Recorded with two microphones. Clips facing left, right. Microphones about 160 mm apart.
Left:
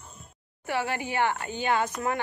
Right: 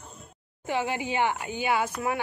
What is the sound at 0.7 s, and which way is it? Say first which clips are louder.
A woman's voice: right 1 dB; 15° right (ahead or behind).